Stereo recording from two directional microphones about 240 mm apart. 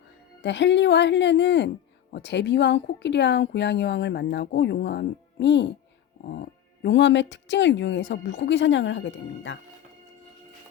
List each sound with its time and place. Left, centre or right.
0.4 s speech: left